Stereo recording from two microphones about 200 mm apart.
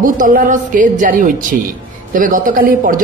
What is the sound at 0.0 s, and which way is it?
A woman's voice, 45° right (ahead or behind).